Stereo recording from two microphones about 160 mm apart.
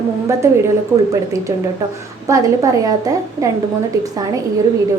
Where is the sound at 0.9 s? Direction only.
10° right (ahead or behind).